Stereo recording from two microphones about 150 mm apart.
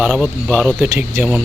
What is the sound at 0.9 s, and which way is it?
Speech, 20° right (ahead or behind).